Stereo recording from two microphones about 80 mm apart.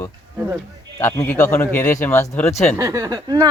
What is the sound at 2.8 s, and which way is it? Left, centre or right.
Speech, right.